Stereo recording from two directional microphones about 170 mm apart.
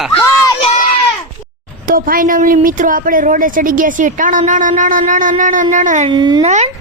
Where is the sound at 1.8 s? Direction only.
55° right (ahead or behind).